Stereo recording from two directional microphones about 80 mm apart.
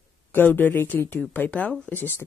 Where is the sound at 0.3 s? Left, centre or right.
Left.